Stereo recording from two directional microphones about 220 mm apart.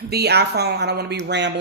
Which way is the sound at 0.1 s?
50° right (ahead or behind).